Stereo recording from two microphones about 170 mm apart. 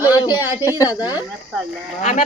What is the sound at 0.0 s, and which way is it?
Speech, 20° left (ahead or behind).